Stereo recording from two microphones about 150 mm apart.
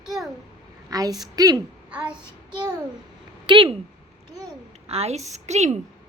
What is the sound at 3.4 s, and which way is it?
Speech, 35° right (ahead or behind).